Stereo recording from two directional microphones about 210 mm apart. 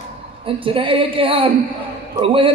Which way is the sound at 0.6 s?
25° right (ahead or behind).